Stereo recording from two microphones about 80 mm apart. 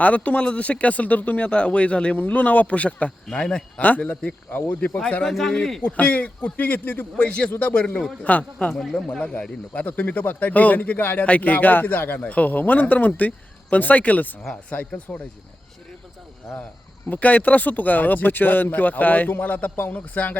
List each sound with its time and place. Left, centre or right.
0.0 s speech: centre
4.9 s speech: centre
5.8 s speech: centre
8.7 s speech: centre
9.1 s speech: centre
17.1 s speech: centre